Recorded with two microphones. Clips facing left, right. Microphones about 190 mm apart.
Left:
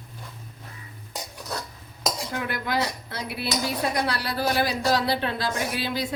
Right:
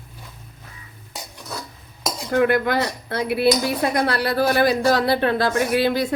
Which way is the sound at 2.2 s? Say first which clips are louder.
Right 11 dB; 60° right (ahead or behind).